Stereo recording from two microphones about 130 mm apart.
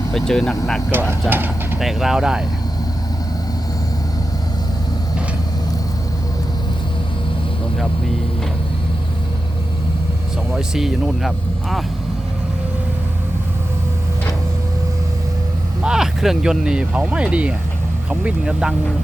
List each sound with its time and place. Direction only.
0.1 s speech: 5° left (ahead or behind)
0.9 s speech: 15° right (ahead or behind)
1.8 s speech: 5° right (ahead or behind)
10.5 s speech: 5° right (ahead or behind)
15.8 s speech: 5° right (ahead or behind)